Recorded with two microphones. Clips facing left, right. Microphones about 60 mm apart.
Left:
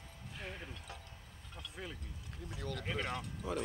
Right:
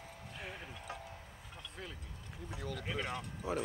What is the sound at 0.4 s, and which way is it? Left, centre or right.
Music, centre.